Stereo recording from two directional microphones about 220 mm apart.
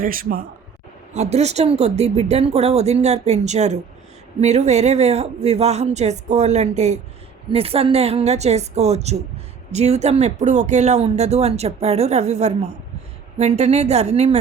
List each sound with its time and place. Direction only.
0.0 s speech: 40° right (ahead or behind)
1.1 s speech: 30° right (ahead or behind)